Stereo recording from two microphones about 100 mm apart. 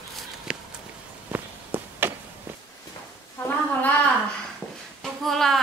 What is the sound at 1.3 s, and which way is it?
Walk, 20° right (ahead or behind).